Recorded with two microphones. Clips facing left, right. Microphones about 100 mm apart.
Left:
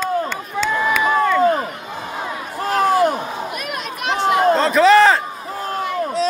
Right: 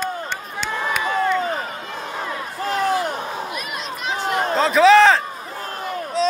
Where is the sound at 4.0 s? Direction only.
75° left (ahead or behind).